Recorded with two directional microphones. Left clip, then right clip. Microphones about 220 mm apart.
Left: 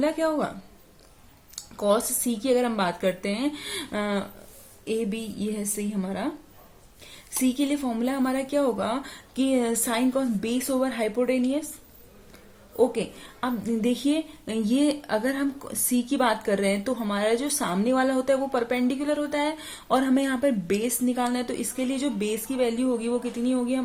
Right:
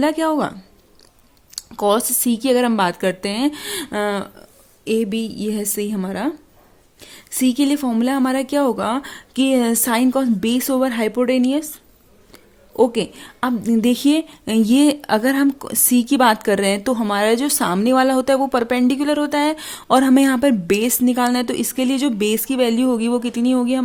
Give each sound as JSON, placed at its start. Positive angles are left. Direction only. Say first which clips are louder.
{"t": 0.0, "sound": "a woman's voice", "louder": "right 6 dB", "side_deg": -50}
{"t": 1.5, "sound": "a woman's voice", "louder": "right 6 dB", "side_deg": -50}